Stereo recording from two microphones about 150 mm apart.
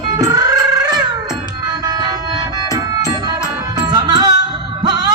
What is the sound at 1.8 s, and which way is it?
Music, 25° right (ahead or behind).